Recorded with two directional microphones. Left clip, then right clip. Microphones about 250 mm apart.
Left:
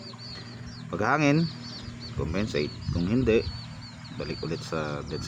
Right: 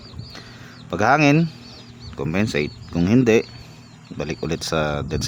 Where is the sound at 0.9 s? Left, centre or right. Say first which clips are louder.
Right 8 dB; right.